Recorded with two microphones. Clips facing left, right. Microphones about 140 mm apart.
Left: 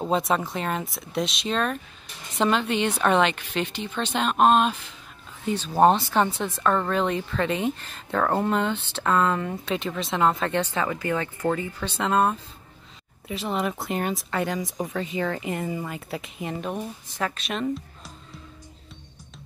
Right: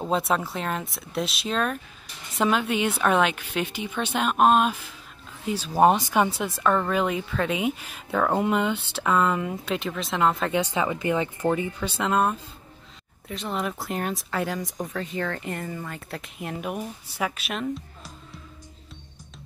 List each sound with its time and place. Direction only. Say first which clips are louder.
0.0 s speech: left 1 dB; centre (ahead or behind)
10.6 s speech: right 1 dB; 15° right (ahead or behind)
11.9 s speech: left 2 dB; centre (ahead or behind)